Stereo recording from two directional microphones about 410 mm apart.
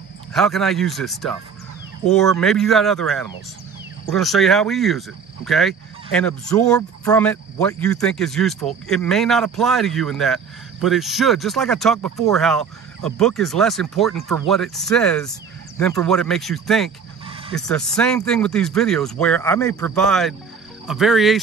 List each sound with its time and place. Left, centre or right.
0.3 s speech: centre
17.3 s a sound: centre
17.6 s speech: centre